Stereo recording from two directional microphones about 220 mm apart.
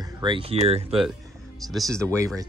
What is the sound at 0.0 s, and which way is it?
Speech, 20° right (ahead or behind).